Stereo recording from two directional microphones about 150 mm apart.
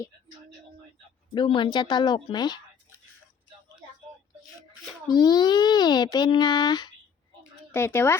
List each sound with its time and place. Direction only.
1.3 s speech: 35° left (ahead or behind)
5.0 s speech: 25° left (ahead or behind)
7.7 s speech: 15° left (ahead or behind)